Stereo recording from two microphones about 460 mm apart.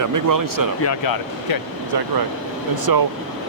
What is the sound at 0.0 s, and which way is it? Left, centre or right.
Speech, right.